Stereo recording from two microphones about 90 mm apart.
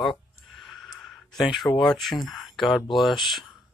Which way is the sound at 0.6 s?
Centre (ahead or behind).